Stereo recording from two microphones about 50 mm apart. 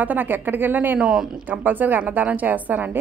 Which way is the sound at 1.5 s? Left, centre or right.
Right.